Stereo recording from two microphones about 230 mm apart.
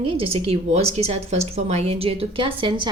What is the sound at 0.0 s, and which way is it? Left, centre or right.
A woman's voice, right.